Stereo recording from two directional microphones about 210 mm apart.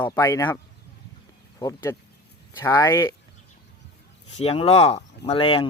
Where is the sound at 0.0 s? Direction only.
15° left (ahead or behind).